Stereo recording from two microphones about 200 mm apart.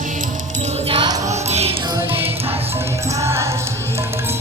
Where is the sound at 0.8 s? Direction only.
25° right (ahead or behind).